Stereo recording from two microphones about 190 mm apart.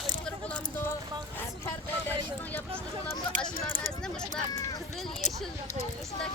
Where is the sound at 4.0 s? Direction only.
5° left (ahead or behind).